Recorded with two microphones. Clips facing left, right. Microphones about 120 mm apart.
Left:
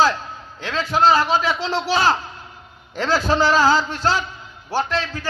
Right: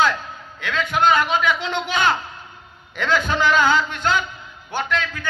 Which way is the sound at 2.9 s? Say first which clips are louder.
Left 2 dB; 35° left (ahead or behind).